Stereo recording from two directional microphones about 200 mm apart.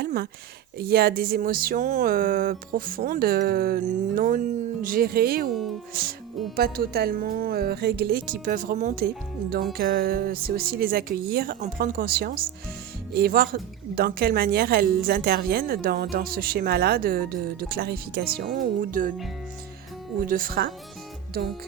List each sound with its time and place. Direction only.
0.0 s a sound: 55° right (ahead or behind)
0.8 s a woman's voice: 50° right (ahead or behind)
20.2 s a woman's voice: 45° right (ahead or behind)